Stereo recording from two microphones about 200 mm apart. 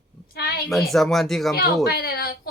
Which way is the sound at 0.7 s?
Centre (ahead or behind).